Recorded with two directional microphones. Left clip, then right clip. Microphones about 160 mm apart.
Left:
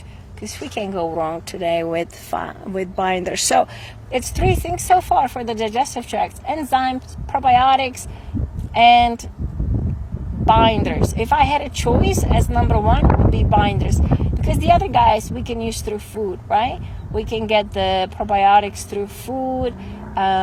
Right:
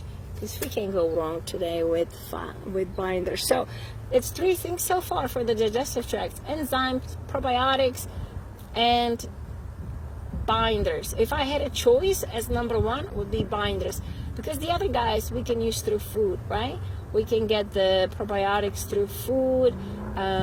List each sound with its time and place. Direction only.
0.4 s speech: 50° left (ahead or behind)
10.5 s speech: 50° left (ahead or behind)